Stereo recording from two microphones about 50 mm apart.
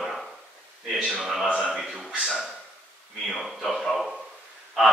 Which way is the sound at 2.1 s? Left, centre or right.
Centre.